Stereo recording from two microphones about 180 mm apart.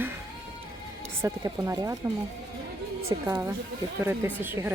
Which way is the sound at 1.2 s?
20° right (ahead or behind).